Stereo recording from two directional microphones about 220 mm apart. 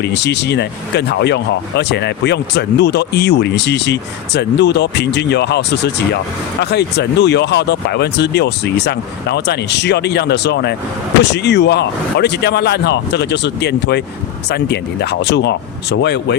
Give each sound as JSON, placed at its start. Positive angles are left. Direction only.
{"t": 0.0, "sound": "speech", "side_deg": 50}